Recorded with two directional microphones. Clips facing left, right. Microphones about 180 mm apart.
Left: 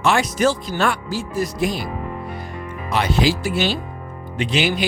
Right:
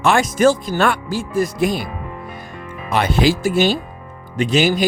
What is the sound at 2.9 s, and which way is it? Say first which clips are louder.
Speech: right 3 dB; 55° right (ahead or behind).